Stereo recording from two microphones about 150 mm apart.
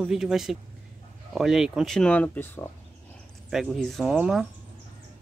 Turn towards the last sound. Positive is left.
turn(degrees=-5)  # may be behind; listen again after turning